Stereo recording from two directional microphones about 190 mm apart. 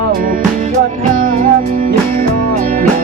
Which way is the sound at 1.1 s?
45° right (ahead or behind).